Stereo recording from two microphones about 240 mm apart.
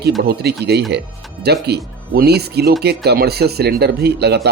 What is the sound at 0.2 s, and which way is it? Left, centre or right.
Speech, right.